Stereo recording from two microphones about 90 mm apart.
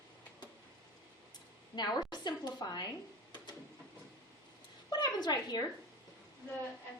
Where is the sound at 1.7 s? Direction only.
50° left (ahead or behind).